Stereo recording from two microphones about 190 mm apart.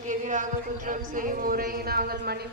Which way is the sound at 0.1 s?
40° right (ahead or behind).